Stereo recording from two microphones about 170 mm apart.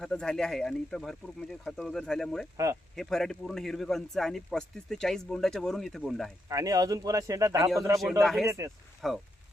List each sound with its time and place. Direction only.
0.0 s speech: 5° left (ahead or behind)
6.5 s a man's voice: 20° right (ahead or behind)
8.2 s speech: centre (ahead or behind)
8.4 s a man's voice: 15° right (ahead or behind)
9.0 s speech: centre (ahead or behind)